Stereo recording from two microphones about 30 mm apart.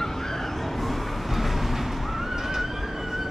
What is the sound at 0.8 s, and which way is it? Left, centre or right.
Neigh, centre.